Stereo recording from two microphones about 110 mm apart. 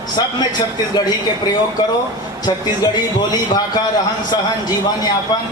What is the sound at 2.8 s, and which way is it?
Speech, 40° left (ahead or behind).